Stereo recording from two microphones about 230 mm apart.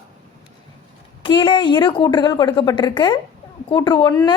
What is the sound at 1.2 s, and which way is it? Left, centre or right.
A woman's voice, left.